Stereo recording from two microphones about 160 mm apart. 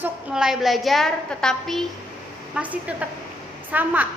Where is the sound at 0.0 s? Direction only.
5° right (ahead or behind).